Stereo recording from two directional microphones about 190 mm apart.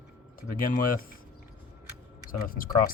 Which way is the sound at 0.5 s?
45° left (ahead or behind).